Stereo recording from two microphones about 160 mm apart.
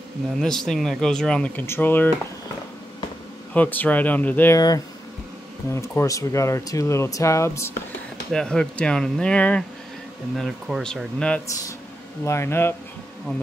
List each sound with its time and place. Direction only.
0.4 s speech: 5° left (ahead or behind)
3.5 s speech: 10° left (ahead or behind)
4.6 s speech: 25° left (ahead or behind)
8.3 s speech: 5° left (ahead or behind)
12.3 s speech: 15° left (ahead or behind)